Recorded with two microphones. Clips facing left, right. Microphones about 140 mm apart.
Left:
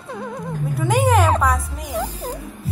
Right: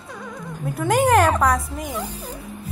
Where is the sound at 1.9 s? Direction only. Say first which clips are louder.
Left 4 dB; 90° left.